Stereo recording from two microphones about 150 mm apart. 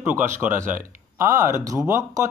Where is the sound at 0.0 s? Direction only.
10° right (ahead or behind).